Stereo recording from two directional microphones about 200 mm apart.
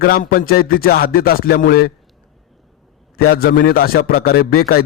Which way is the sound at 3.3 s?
50° left (ahead or behind).